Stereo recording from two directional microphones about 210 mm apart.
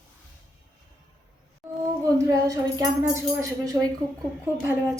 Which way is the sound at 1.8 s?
15° right (ahead or behind).